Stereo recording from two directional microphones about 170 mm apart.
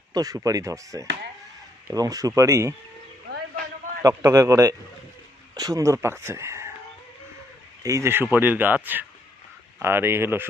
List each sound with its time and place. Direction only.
0.1 s speech: 20° right (ahead or behind)
3.3 s a sound: 75° right (ahead or behind)
4.0 s speech: 15° right (ahead or behind)
7.8 s speech: 20° right (ahead or behind)